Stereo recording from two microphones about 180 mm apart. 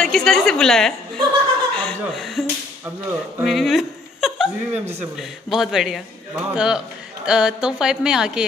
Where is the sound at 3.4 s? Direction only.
Centre (ahead or behind).